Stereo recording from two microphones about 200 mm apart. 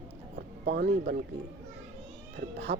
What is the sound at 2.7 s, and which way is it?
Speech, 50° right (ahead or behind).